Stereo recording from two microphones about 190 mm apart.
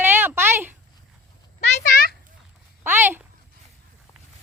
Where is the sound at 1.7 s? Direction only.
55° left (ahead or behind).